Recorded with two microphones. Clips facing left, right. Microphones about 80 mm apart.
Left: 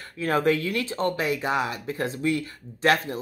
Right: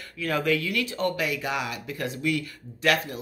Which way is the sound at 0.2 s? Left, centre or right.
Left.